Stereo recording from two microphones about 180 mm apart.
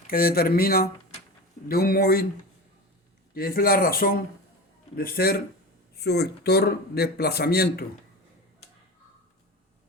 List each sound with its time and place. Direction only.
0.1 s speech: 55° left (ahead or behind)
3.3 s speech: 55° left (ahead or behind)